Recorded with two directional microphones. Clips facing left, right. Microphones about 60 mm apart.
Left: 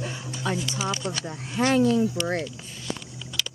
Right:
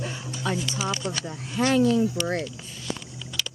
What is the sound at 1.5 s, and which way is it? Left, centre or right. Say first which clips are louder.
Speech: even; left.